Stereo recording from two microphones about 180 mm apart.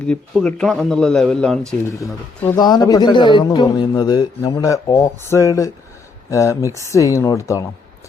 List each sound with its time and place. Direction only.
0.0 s speech: 5° left (ahead or behind)
2.6 s a man's voice: 20° left (ahead or behind)